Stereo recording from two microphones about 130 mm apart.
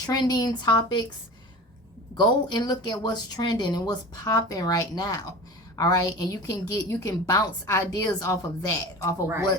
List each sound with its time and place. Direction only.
0.0 s speech: 30° left (ahead or behind)
2.1 s a woman's voice: 30° left (ahead or behind)
9.2 s speech: 20° right (ahead or behind)